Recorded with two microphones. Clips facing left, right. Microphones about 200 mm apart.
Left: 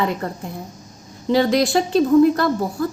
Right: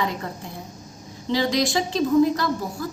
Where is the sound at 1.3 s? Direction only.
55° left (ahead or behind).